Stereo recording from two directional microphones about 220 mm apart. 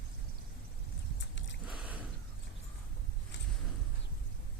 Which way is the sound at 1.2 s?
55° left (ahead or behind).